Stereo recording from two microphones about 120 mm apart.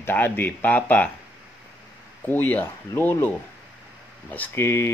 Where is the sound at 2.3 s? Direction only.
15° left (ahead or behind).